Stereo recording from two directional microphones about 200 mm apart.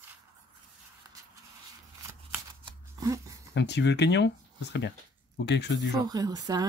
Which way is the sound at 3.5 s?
60° left (ahead or behind).